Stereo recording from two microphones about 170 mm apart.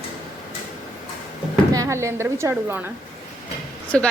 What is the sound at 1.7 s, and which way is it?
A woman's voice, 20° right (ahead or behind).